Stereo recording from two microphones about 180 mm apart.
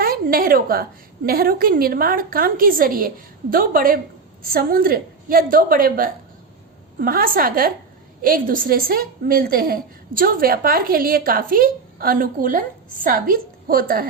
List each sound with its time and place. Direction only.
0.0 s a woman's voice: 55° right (ahead or behind)